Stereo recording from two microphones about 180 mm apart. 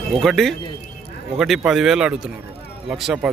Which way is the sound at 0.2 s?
Centre (ahead or behind).